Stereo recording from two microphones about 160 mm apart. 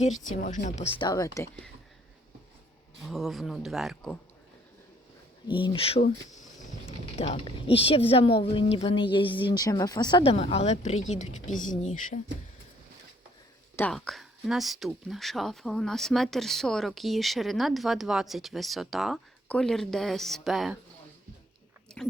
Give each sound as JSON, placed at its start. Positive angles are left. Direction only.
{"t": 0.3, "sound": "speech", "side_deg": 50}
{"t": 1.0, "sound": "speech", "side_deg": 20}
{"t": 3.1, "sound": "speech", "side_deg": 0}
{"t": 5.5, "sound": "speech", "side_deg": 35}
{"t": 13.7, "sound": "speech", "side_deg": 5}
{"t": 21.9, "sound": "chewing", "side_deg": 5}